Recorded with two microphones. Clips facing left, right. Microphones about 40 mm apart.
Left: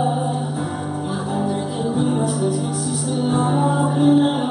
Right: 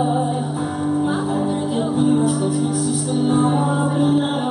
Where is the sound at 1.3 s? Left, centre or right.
Centre.